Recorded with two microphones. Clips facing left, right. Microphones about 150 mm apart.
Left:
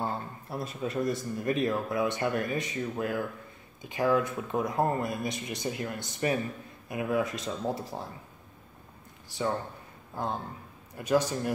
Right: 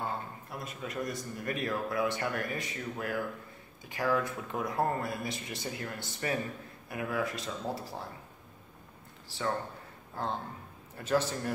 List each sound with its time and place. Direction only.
0.0 s a man's voice: 30° left (ahead or behind)
10.1 s a man's voice: 10° left (ahead or behind)